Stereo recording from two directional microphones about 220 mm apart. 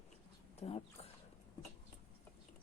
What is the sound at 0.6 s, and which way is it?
Speech, 30° left (ahead or behind).